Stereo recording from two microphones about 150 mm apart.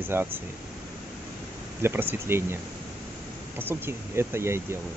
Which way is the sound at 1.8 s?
15° right (ahead or behind).